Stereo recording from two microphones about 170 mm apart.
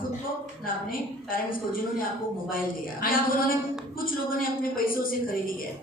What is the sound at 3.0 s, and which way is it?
Speech, 55° left (ahead or behind).